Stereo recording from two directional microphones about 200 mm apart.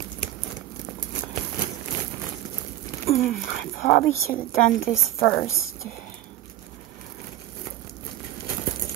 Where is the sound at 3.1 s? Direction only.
45° left (ahead or behind).